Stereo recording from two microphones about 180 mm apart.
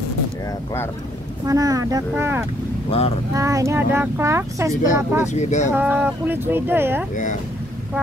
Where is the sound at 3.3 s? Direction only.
15° right (ahead or behind).